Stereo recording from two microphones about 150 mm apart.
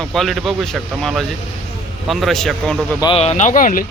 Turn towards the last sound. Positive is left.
turn(degrees=65)  # may be behind; listen again after turning